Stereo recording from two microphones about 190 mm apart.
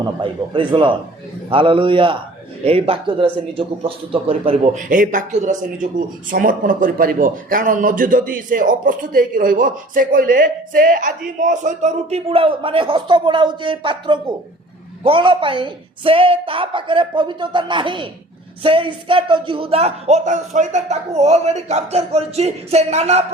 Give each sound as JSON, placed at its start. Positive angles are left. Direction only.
{"t": 0.0, "sound": "a man's voice", "side_deg": -25}